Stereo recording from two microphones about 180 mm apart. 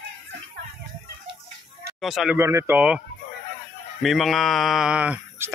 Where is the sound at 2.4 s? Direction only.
15° right (ahead or behind).